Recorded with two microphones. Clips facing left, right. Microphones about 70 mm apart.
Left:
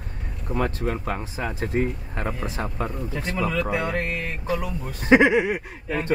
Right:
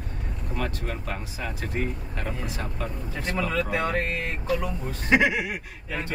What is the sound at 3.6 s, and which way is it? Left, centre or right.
Speech, centre.